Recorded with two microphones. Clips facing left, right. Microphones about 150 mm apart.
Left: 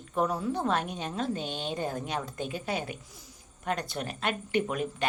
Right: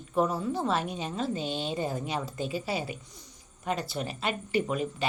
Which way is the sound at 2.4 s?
55° left (ahead or behind).